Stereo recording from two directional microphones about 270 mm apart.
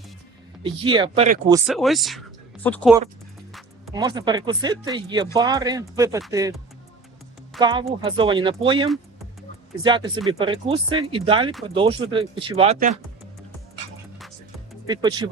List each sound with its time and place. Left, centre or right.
0.6 s speech: centre
1.5 s speech: centre
3.9 s speech: centre
7.6 s speech: centre
14.8 s speech: centre